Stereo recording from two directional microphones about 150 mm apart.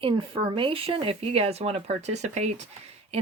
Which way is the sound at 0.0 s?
35° right (ahead or behind).